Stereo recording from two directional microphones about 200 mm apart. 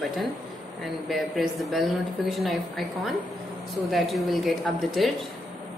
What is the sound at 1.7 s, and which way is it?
A woman's voice, centre (ahead or behind).